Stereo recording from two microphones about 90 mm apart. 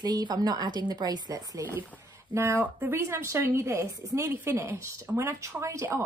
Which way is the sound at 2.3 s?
25° right (ahead or behind).